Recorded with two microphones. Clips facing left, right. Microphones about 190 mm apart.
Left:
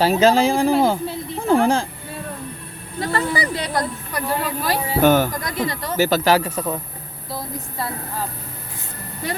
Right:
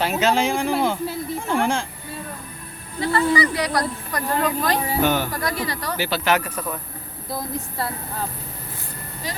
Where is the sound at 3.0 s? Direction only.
40° left (ahead or behind).